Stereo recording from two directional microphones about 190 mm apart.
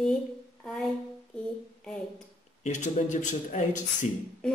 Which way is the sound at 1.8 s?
5° left (ahead or behind).